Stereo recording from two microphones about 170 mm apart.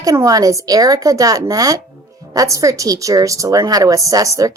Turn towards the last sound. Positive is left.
turn(degrees=-20)  # may be behind; listen again after turning